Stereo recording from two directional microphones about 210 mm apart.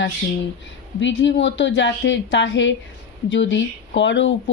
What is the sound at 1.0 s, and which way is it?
Speech, 60° left (ahead or behind).